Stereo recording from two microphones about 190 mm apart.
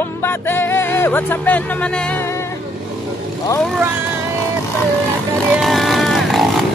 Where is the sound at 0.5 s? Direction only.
10° left (ahead or behind).